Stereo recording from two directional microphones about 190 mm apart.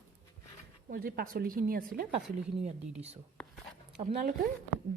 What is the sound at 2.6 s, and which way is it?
Speech, 35° right (ahead or behind).